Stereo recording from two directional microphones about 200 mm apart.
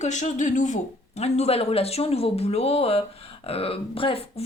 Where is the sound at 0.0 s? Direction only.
35° left (ahead or behind).